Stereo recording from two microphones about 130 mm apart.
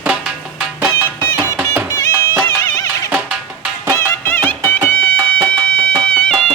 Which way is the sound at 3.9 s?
15° left (ahead or behind).